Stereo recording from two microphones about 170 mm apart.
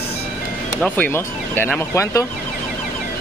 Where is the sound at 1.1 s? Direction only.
10° left (ahead or behind).